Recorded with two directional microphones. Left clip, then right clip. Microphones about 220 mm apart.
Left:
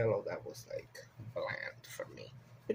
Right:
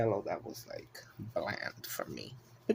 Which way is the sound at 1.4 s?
55° right (ahead or behind).